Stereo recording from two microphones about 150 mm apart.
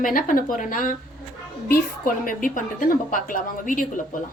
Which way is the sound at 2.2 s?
65° left (ahead or behind).